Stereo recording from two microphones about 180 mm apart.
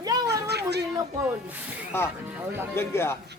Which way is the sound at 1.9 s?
15° left (ahead or behind).